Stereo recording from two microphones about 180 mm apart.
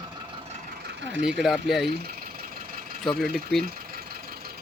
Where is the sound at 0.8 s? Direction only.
80° right.